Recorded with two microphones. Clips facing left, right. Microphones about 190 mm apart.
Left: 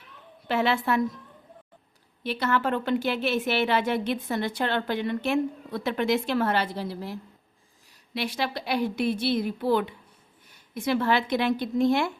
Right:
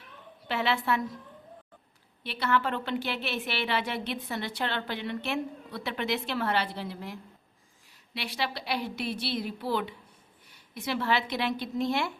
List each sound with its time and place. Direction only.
0.4 s a woman's voice: 45° left (ahead or behind)
2.2 s a woman's voice: 40° left (ahead or behind)